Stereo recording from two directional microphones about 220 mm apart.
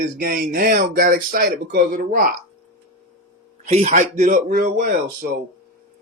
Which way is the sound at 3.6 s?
35° right (ahead or behind).